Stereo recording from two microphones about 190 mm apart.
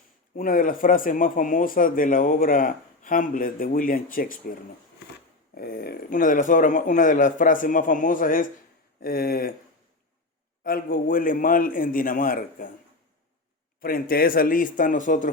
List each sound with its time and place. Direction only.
0.3 s speech: 45° left (ahead or behind)
5.5 s speech: 55° left (ahead or behind)
10.6 s speech: 50° left (ahead or behind)
13.8 s speech: 50° left (ahead or behind)